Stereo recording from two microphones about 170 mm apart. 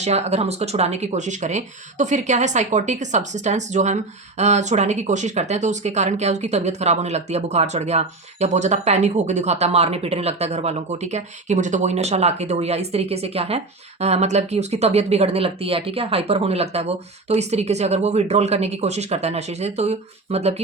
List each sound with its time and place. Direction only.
0.0 s speech: 40° right (ahead or behind)